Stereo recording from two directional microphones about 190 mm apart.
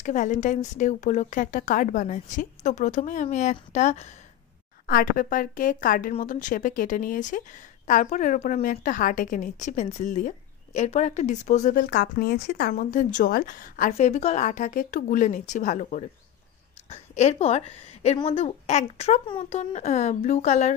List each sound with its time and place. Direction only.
0.0 s speech: 40° left (ahead or behind)
4.8 s speech: 50° left (ahead or behind)